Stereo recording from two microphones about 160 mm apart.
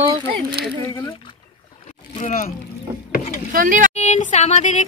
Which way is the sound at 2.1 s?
45° left (ahead or behind).